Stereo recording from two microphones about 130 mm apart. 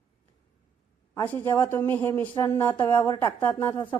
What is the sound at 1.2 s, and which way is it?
Speech, 15° left (ahead or behind).